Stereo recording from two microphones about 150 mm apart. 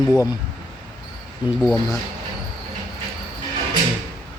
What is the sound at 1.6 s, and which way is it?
Speech, 20° left (ahead or behind).